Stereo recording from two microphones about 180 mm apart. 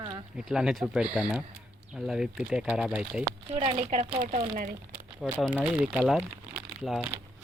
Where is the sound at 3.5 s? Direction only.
35° right (ahead or behind).